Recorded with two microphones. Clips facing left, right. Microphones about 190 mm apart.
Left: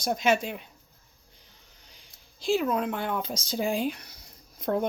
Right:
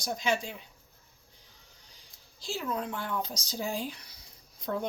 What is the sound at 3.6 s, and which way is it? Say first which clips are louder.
Speech: left 7 dB; 75° left (ahead or behind).